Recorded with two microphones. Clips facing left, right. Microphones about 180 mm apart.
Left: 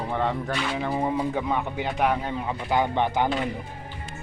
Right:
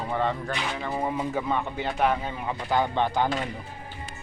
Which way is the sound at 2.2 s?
10° right (ahead or behind).